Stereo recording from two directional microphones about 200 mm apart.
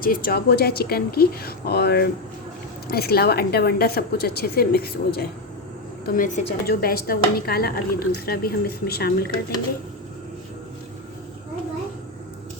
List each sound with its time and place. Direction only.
0.0 s a woman's voice: 45° left (ahead or behind)
6.1 s a woman's voice: 40° left (ahead or behind)
6.7 s a woman's voice: 50° left (ahead or behind)